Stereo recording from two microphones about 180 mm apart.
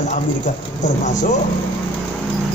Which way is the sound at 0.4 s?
45° left (ahead or behind).